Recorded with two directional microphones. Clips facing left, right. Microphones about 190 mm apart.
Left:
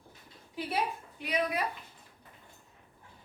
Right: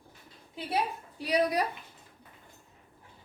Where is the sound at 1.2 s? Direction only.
35° right (ahead or behind).